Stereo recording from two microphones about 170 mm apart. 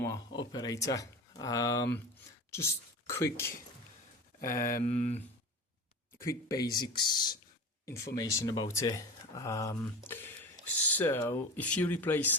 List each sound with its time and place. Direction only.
0.3 s speech: 25° left (ahead or behind)
4.4 s speech: 55° left (ahead or behind)
6.1 s speech: 20° left (ahead or behind)